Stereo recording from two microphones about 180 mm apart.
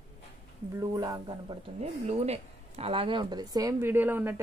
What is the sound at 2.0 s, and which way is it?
Speech, 35° right (ahead or behind).